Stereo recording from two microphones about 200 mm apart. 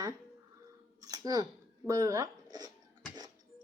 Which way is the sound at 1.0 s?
20° right (ahead or behind).